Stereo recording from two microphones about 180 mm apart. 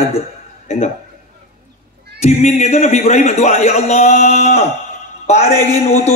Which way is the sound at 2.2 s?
40° left (ahead or behind).